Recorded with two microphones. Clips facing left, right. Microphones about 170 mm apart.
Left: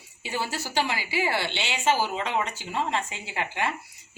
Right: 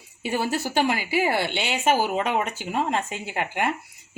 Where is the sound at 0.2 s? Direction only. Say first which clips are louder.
Right 6 dB; 55° right (ahead or behind).